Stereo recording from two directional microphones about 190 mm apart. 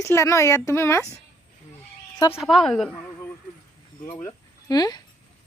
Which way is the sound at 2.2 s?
15° left (ahead or behind).